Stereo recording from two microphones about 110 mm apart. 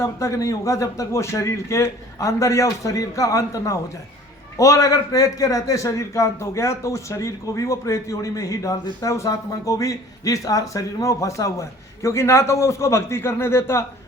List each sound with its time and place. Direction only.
0.0 s a man's voice: 25° left (ahead or behind)